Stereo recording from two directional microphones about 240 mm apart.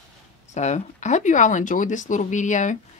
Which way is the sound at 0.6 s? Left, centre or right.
Left.